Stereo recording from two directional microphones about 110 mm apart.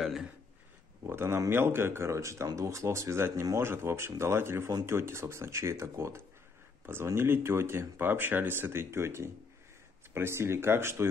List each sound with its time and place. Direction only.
0.0 s speech: centre (ahead or behind)
1.0 s speech: 20° right (ahead or behind)